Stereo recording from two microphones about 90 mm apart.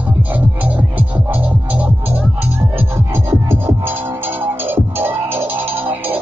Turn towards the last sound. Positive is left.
turn(degrees=-20)  # may be behind; listen again after turning